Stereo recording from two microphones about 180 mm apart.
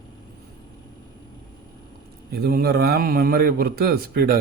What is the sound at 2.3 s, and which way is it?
A man's voice, 60° right (ahead or behind).